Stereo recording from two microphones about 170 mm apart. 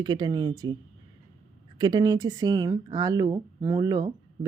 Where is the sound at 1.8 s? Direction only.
25° right (ahead or behind).